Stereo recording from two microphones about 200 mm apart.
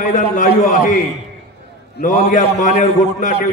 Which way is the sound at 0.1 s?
40° left (ahead or behind).